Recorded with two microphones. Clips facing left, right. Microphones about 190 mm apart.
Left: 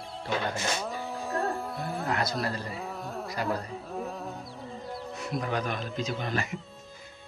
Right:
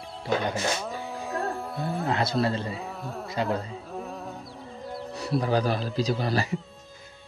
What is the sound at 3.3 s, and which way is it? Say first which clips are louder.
Speech: right 4 dB; 25° right (ahead or behind).